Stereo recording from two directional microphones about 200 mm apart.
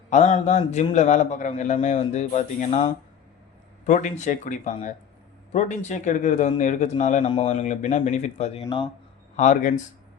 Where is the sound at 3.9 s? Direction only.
35° left (ahead or behind).